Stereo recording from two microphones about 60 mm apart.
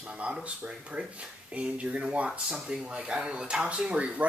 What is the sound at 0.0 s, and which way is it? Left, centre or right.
Speech, centre.